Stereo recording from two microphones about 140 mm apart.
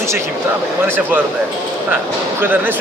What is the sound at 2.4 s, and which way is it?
Speech, 15° right (ahead or behind).